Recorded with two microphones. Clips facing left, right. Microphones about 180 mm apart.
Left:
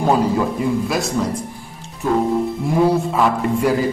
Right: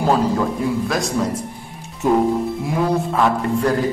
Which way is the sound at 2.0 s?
20° right (ahead or behind).